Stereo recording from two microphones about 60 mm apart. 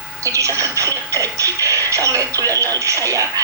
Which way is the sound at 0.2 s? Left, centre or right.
Right.